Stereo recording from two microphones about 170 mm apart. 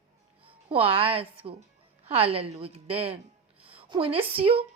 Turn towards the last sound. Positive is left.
turn(degrees=-35)  # may be behind; listen again after turning